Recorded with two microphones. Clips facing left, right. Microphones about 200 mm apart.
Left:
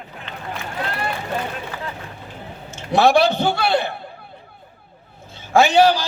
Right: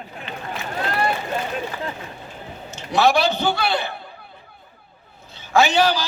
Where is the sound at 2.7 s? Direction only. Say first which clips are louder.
Left 3 dB; 55° left (ahead or behind).